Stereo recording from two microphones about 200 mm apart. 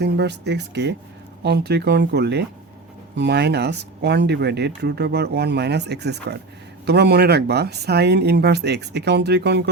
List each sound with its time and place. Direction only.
0.0 s speech: 55° right (ahead or behind)